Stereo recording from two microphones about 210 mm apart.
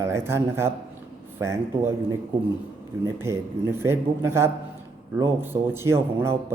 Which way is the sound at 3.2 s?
10° right (ahead or behind).